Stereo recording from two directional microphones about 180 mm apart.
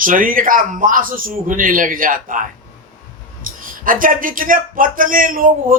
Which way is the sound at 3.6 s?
50° right (ahead or behind).